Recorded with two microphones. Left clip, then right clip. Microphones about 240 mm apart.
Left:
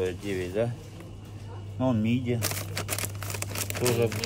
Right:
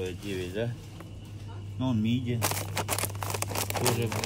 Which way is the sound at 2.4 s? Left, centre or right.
Centre.